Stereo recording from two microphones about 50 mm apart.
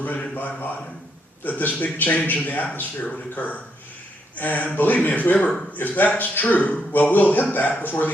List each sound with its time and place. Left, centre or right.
0.0 s a man's voice: left